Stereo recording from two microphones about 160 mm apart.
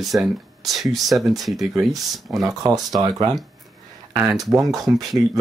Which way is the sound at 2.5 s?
25° right (ahead or behind).